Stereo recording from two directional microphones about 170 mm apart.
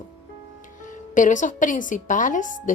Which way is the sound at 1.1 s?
50° left (ahead or behind).